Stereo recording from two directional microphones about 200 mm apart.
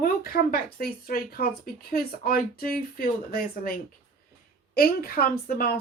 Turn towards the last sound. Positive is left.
turn(degrees=50)  # may be behind; listen again after turning